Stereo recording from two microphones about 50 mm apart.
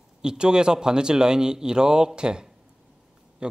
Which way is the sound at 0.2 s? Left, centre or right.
Centre.